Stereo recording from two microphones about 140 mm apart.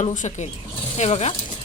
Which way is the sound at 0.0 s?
60° left (ahead or behind).